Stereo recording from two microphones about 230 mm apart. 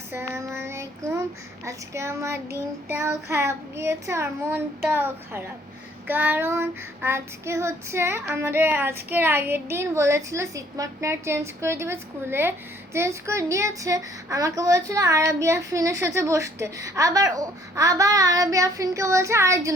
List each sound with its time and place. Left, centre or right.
0.1 s child singing: centre